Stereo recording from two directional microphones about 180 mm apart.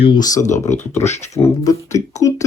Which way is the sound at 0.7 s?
40° left (ahead or behind).